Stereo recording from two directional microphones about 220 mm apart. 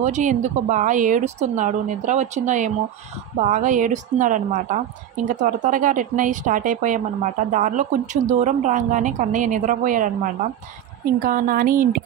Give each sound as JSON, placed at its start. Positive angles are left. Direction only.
{"t": 0.0, "sound": "a woman's voice", "side_deg": -35}